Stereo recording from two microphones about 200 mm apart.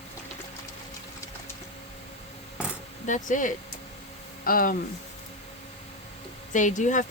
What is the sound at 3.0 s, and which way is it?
Speech, 40° left (ahead or behind).